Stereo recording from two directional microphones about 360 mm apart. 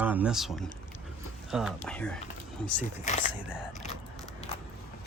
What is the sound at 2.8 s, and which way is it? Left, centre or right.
Speech, centre.